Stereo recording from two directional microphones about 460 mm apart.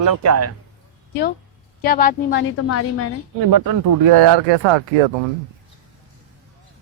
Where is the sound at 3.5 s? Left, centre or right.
Right.